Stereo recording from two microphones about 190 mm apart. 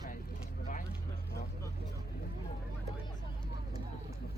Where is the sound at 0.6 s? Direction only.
45° left (ahead or behind).